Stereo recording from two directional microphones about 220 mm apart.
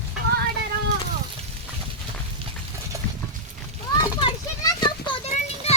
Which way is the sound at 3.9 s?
20° left (ahead or behind).